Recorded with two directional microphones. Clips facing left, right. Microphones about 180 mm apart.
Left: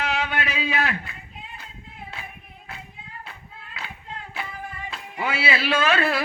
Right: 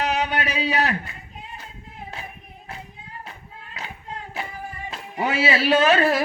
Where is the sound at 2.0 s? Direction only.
40° right (ahead or behind).